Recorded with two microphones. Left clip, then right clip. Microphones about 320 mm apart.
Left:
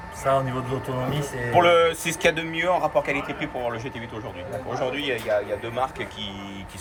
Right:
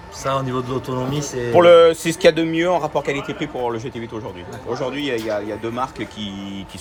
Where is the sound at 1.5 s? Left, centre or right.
Right.